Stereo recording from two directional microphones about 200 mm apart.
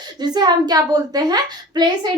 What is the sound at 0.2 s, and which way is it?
A child's voice, 20° right (ahead or behind).